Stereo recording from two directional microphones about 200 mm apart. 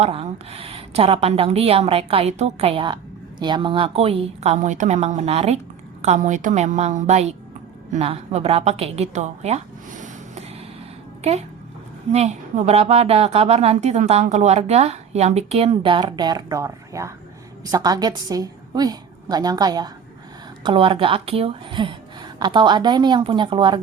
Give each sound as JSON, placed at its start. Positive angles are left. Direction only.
{"t": 0.0, "sound": "a woman's voice", "side_deg": -30}